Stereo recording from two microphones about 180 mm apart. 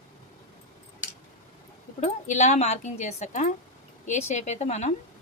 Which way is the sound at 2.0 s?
40° left (ahead or behind).